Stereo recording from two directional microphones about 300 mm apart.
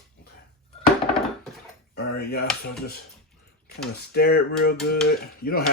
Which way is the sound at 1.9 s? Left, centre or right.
Left.